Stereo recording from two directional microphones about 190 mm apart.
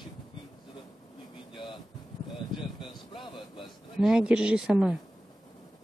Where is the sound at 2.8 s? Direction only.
25° left (ahead or behind).